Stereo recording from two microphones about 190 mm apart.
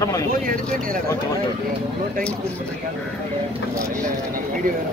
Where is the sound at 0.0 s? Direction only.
20° left (ahead or behind).